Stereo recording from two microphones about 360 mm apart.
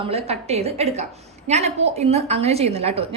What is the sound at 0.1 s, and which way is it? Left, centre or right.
A woman's voice, centre.